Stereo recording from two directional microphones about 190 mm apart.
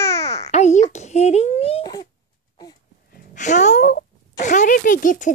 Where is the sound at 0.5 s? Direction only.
35° left (ahead or behind); by 2.1 s 20° left (ahead or behind).